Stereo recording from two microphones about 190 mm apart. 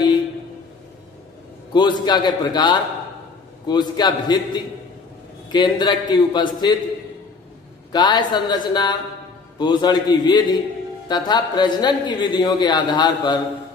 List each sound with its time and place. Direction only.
1.7 s a man's voice: 25° left (ahead or behind)
7.9 s a man's voice: 20° left (ahead or behind)